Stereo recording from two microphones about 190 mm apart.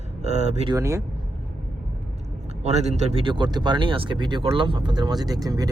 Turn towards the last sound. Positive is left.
turn(degrees=-20)  # may be behind; listen again after turning